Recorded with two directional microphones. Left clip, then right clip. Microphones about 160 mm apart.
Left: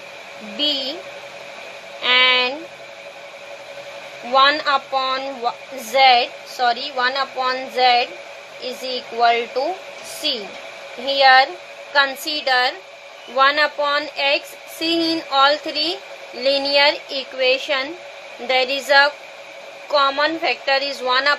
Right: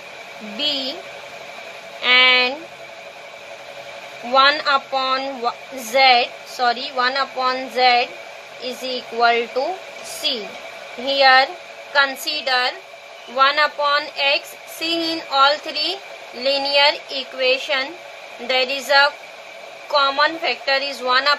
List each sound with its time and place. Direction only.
0.6 s speech: 10° left (ahead or behind)
2.0 s a sound: 10° left (ahead or behind)
4.3 s speech: 5° left (ahead or behind)
11.1 s a woman's voice: 5° left (ahead or behind)
12.3 s a woman's voice: 30° left (ahead or behind)
13.4 s speech: 20° left (ahead or behind)